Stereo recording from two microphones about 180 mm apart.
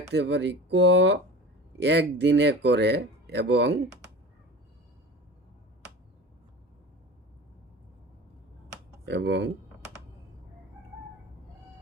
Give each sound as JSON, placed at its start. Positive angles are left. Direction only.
{"t": 0.1, "sound": "speech", "side_deg": -75}
{"t": 9.0, "sound": "speech", "side_deg": -75}